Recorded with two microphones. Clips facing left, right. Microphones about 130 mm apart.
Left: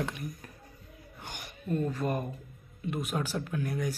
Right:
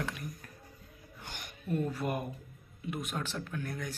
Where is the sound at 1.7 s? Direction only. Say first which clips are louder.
Left 2 dB; 10° right (ahead or behind).